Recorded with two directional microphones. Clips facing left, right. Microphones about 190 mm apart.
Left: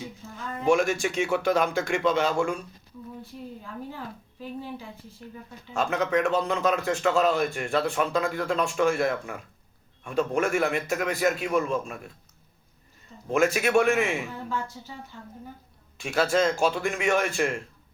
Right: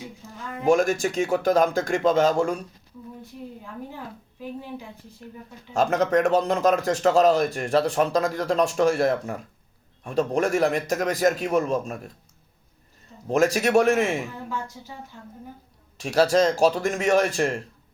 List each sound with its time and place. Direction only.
0.6 s a man's voice: 40° right (ahead or behind)
3.6 s a woman's voice: 15° right (ahead or behind)
5.7 s a man's voice: 40° right (ahead or behind)
13.2 s a man's voice: 35° right (ahead or behind)
14.5 s speech: 15° right (ahead or behind)
16.0 s a man's voice: 35° right (ahead or behind)